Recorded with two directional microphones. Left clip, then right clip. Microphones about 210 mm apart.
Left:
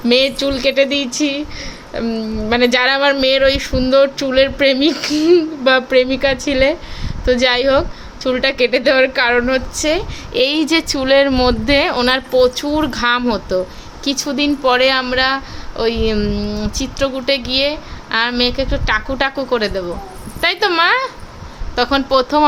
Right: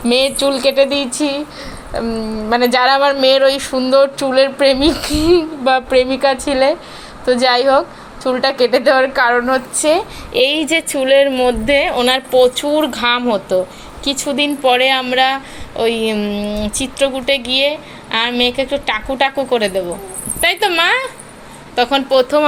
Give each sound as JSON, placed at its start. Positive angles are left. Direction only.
{"t": 0.0, "sound": "a woman's voice", "side_deg": 10}
{"t": 2.5, "sound": "a woman's voice", "side_deg": 15}